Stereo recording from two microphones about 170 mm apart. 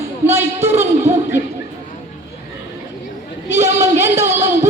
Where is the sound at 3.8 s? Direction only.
15° right (ahead or behind).